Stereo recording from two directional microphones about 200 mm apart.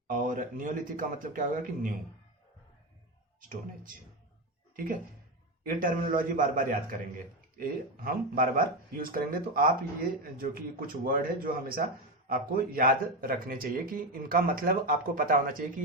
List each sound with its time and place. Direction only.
0.1 s a man's voice: 40° right (ahead or behind)
5.6 s speech: 45° right (ahead or behind)